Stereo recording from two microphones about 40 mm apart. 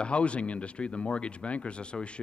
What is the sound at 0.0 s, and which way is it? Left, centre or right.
A man's voice, left.